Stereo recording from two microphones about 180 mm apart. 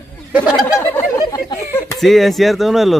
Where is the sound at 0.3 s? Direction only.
5° right (ahead or behind).